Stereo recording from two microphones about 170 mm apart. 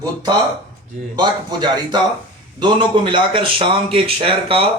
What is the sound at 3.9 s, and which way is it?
Speech, 35° right (ahead or behind).